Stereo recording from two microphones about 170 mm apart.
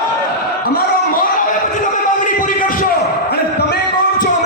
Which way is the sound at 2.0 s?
50° left (ahead or behind).